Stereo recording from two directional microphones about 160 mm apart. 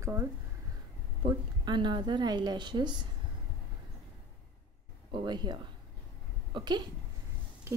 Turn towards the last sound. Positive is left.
turn(degrees=-20)  # may be behind; listen again after turning